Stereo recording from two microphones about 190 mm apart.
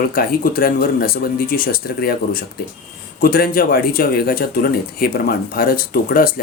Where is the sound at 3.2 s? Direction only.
50° left (ahead or behind).